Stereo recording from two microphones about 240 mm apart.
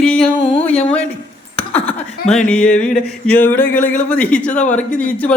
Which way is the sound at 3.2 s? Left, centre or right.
Centre.